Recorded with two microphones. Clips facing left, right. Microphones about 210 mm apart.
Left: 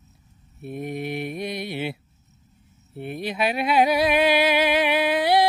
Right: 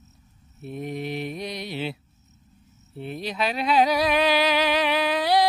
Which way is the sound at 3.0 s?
55° left (ahead or behind).